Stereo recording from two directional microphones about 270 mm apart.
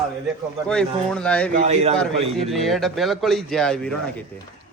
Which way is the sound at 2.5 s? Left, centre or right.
Centre.